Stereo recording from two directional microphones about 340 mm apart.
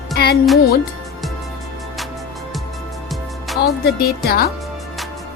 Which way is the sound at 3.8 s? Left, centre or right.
Left.